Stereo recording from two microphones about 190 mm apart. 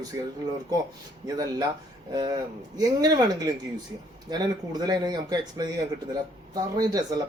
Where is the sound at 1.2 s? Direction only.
20° right (ahead or behind).